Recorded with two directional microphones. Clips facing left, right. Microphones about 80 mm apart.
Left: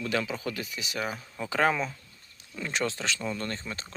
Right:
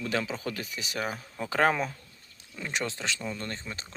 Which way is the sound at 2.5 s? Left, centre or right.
Centre.